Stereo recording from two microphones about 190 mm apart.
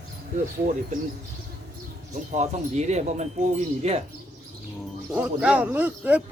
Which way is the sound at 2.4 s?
35° right (ahead or behind).